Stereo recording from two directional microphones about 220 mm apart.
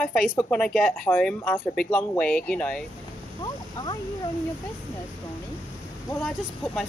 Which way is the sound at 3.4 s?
20° left (ahead or behind).